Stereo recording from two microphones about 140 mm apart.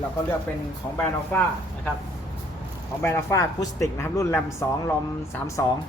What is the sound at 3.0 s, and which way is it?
Speech, 20° left (ahead or behind).